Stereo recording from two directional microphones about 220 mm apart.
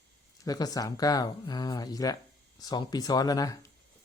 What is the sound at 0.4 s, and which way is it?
Speech, 15° left (ahead or behind).